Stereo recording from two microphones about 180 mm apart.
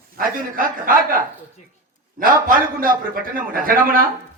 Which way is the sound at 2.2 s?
50° right (ahead or behind).